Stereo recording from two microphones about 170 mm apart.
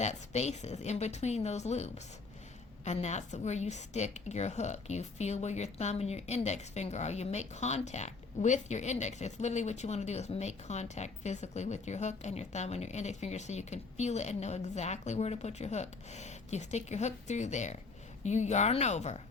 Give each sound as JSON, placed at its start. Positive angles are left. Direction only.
{"t": 0.0, "sound": "a woman's voice", "side_deg": 40}